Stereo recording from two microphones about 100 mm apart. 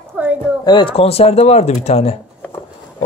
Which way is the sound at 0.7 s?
45° left (ahead or behind).